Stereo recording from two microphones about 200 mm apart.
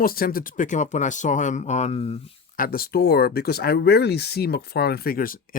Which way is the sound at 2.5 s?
45° left (ahead or behind).